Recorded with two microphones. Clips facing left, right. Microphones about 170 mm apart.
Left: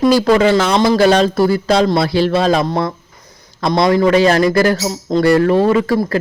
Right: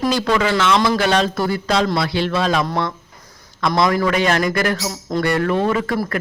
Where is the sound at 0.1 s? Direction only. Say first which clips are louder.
Left 7 dB; 40° left (ahead or behind).